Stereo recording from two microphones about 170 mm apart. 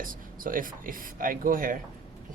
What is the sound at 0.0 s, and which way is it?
Speech, 55° right (ahead or behind).